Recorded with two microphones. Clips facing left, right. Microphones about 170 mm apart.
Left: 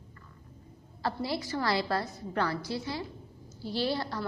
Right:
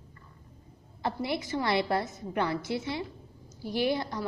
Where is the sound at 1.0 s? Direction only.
20° right (ahead or behind).